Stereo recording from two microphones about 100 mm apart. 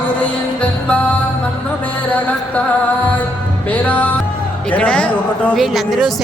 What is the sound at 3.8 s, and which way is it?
Music, 15° left (ahead or behind).